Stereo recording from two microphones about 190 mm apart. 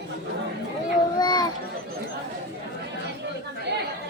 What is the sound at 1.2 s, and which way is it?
Children playing, 20° left (ahead or behind).